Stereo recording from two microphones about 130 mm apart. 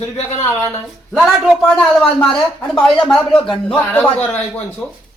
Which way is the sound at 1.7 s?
5° left (ahead or behind).